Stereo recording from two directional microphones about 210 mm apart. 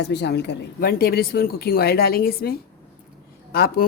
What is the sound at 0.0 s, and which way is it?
Speech, 55° left (ahead or behind).